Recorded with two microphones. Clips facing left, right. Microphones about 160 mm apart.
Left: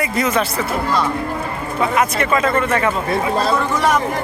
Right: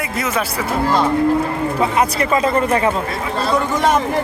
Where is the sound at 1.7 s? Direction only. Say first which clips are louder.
Left 1 dB; 30° right (ahead or behind).